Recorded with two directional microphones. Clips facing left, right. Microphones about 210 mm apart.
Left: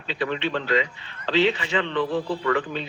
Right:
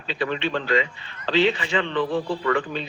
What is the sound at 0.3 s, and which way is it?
A man's voice, 35° right (ahead or behind).